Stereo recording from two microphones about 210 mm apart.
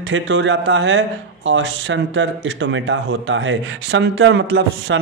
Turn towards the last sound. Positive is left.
turn(degrees=-60)  # may be behind; listen again after turning